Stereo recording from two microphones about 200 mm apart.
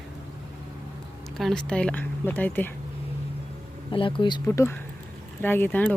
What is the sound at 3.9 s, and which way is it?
Speech, 25° left (ahead or behind).